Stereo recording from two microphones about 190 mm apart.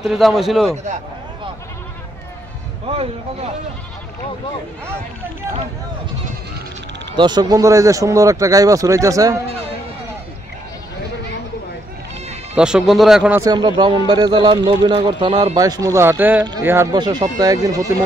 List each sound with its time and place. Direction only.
0.0 s speech: centre (ahead or behind)
2.9 s speech: 30° right (ahead or behind)
7.2 s speech: 20° right (ahead or behind)
12.5 s speech: 5° right (ahead or behind)
13.4 s a man's voice: 20° right (ahead or behind)